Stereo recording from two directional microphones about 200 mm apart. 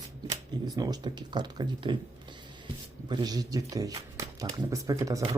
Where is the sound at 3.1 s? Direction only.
20° right (ahead or behind).